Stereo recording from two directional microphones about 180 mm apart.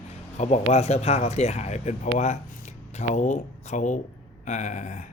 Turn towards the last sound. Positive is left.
turn(degrees=40)  # may be behind; listen again after turning